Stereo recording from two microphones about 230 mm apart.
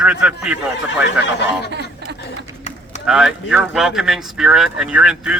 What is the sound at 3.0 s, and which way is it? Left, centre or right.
A man's voice, centre.